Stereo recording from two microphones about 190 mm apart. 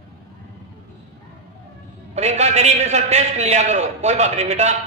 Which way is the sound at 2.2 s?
35° right (ahead or behind).